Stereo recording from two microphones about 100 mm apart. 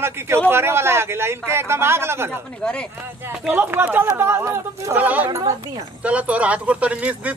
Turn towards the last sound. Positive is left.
turn(degrees=-15)  # may be behind; listen again after turning